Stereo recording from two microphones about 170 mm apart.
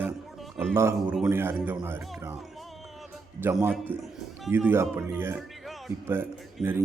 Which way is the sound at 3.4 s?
15° right (ahead or behind).